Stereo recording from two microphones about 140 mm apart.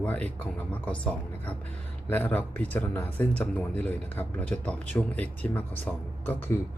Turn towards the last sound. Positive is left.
turn(degrees=15)  # may be behind; listen again after turning